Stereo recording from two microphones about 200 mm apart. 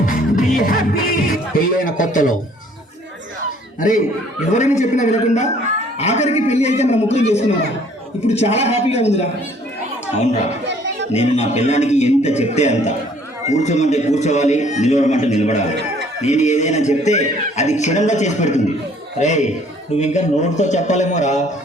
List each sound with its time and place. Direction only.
0.0 s music: 40° left (ahead or behind)
3.8 s speech: 40° left (ahead or behind)
11.1 s speech: 30° left (ahead or behind)
15.7 s a sound: 60° right (ahead or behind)
16.2 s speech: 35° left (ahead or behind)